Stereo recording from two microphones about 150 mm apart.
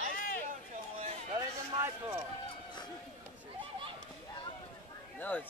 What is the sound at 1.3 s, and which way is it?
Run, 15° right (ahead or behind).